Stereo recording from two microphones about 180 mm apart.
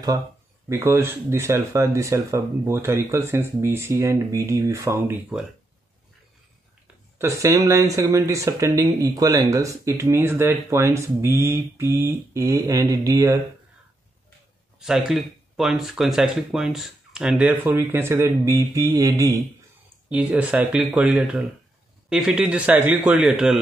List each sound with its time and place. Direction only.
0.7 s speech: 15° right (ahead or behind)
7.2 s speech: 15° right (ahead or behind)
14.8 s speech: centre (ahead or behind)